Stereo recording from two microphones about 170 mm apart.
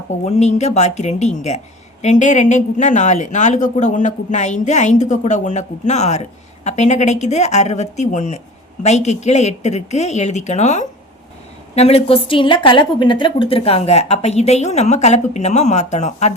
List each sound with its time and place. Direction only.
0.3 s a woman's voice: 40° left (ahead or behind)